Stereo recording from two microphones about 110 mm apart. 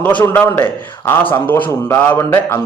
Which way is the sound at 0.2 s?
15° left (ahead or behind).